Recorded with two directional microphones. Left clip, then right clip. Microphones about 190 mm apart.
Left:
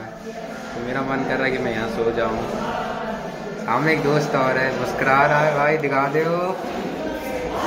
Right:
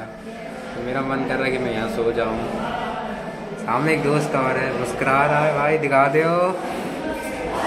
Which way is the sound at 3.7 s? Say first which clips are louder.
Left 1 dB; 15° right (ahead or behind).